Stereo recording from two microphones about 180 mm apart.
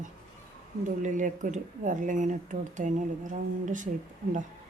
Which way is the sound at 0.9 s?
45° right (ahead or behind).